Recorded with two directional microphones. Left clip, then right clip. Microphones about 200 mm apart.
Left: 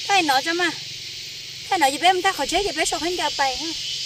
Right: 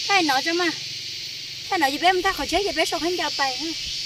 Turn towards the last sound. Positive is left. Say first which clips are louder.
# left 1 dB
turn(degrees=35)  # may be behind; listen again after turning